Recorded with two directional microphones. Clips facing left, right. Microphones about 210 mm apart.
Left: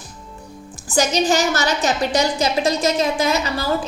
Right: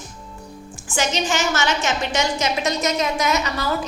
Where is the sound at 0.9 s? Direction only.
35° left (ahead or behind).